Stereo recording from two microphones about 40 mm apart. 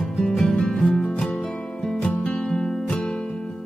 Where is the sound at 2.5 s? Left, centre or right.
Centre.